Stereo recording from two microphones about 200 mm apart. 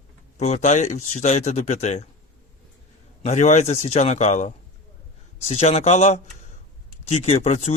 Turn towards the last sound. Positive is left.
turn(degrees=35)  # may be behind; listen again after turning